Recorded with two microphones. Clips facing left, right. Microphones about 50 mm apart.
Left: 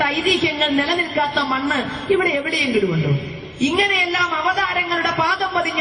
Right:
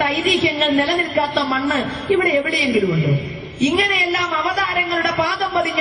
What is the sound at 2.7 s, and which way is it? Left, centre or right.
Speech, right.